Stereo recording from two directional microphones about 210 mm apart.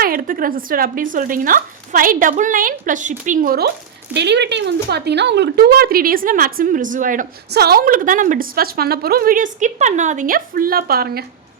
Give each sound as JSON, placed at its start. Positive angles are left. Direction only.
{"t": 0.0, "sound": "speech", "side_deg": -45}
{"t": 4.1, "sound": "speech", "side_deg": -55}